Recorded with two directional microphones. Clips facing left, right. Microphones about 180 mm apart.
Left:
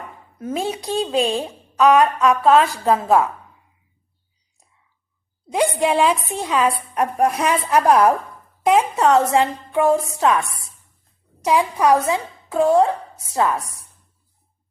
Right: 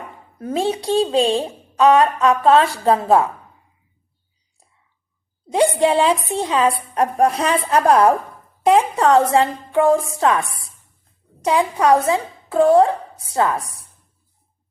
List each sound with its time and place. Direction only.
0.3 s a woman's voice: 30° right (ahead or behind)
5.7 s a woman's voice: 30° right (ahead or behind)